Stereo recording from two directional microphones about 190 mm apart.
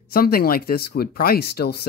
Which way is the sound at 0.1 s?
50° left (ahead or behind).